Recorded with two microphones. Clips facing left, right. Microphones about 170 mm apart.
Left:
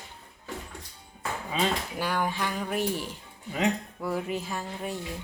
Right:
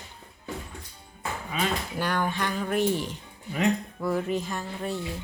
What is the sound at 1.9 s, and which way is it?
Speech, 5° left (ahead or behind).